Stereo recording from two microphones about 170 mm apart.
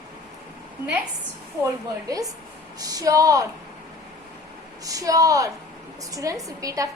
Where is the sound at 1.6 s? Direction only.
20° right (ahead or behind).